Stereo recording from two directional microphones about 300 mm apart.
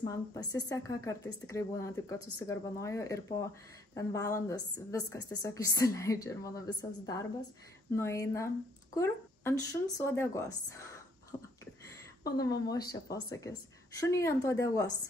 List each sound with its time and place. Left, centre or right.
0.0 s a woman's voice: centre